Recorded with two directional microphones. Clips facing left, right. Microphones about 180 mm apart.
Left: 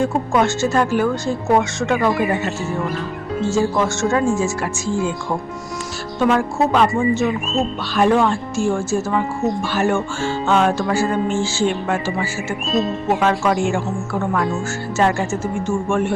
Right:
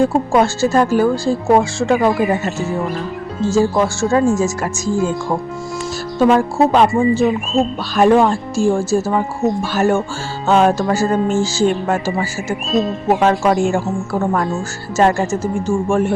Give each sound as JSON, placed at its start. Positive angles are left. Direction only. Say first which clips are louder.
{"t": 0.0, "sound": "speech", "louder": "right 4 dB", "side_deg": -35}
{"t": 3.5, "sound": "speech", "louder": "right 4 dB", "side_deg": -35}
{"t": 6.1, "sound": "speech", "louder": "right 4 dB", "side_deg": -35}